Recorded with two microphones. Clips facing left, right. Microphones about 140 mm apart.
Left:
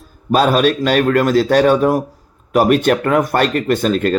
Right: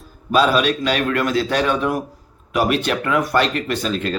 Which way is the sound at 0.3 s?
45° left (ahead or behind).